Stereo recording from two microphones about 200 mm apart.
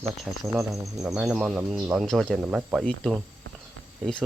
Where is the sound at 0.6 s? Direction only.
15° right (ahead or behind).